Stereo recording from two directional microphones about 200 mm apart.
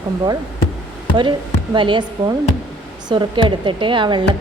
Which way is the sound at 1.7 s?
25° right (ahead or behind).